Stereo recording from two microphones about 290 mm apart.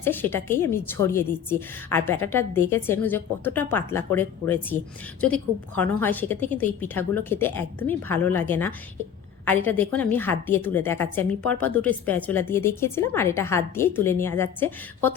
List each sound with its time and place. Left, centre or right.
0.0 s a woman's voice: centre